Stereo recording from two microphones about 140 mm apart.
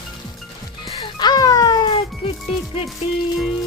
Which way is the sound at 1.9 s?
45° left (ahead or behind).